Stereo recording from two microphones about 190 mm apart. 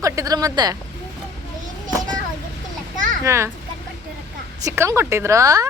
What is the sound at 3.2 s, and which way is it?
Speech, 15° right (ahead or behind).